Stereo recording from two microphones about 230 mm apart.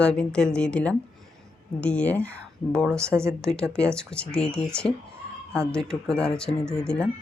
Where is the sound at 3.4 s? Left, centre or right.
Centre.